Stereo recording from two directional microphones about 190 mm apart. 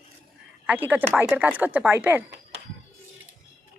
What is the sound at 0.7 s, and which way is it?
Speech, 10° right (ahead or behind).